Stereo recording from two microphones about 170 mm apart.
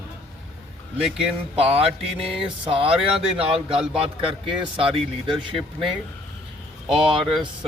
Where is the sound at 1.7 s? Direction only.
35° right (ahead or behind).